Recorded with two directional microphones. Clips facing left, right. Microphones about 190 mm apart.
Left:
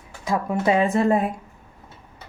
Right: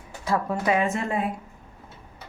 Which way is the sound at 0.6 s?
30° left (ahead or behind).